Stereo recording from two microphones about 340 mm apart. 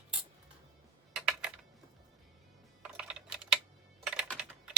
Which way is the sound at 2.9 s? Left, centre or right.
Centre.